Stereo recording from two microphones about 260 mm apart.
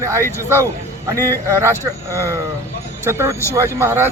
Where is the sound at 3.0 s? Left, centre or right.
Centre.